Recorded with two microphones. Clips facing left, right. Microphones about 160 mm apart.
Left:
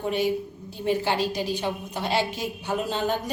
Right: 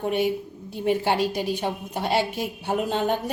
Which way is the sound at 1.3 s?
55° right (ahead or behind).